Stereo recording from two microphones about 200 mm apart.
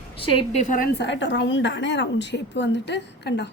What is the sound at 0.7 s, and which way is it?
A woman's voice, 50° left (ahead or behind).